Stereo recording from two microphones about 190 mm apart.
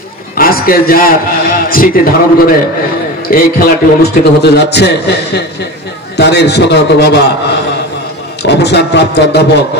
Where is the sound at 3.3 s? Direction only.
50° left (ahead or behind).